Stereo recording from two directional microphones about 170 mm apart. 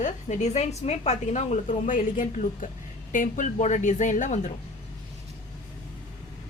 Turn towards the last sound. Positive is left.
turn(degrees=45)  # may be behind; listen again after turning